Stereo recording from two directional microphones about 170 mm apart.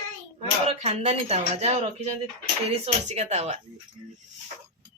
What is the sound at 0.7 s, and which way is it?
Speech, 40° right (ahead or behind).